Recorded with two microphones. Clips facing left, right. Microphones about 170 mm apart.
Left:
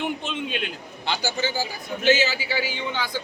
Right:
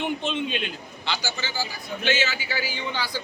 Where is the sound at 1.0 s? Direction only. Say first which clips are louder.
Left 5 dB; 50° left (ahead or behind).